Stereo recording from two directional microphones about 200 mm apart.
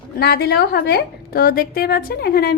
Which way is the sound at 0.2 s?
55° left (ahead or behind).